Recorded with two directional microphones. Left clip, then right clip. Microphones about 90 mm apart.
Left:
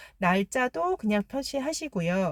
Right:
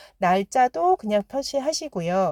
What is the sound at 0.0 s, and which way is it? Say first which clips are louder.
A woman's voice: right 5 dB; 25° right (ahead or behind).